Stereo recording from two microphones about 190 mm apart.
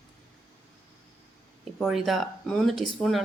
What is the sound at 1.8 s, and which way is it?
Speech, centre (ahead or behind).